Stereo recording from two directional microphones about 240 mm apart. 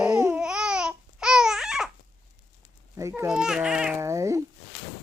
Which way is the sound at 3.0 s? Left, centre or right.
Centre.